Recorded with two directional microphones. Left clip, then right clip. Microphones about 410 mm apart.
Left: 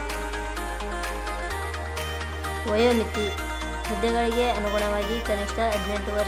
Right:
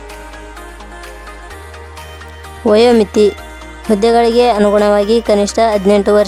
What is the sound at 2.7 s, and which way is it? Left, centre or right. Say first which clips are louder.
Music: right 13 dB; right.